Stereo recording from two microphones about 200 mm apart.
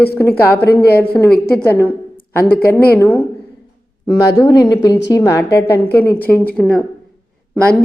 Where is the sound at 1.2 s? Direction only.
10° left (ahead or behind).